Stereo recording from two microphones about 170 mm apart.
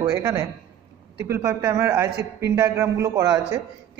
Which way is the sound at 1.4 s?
20° right (ahead or behind).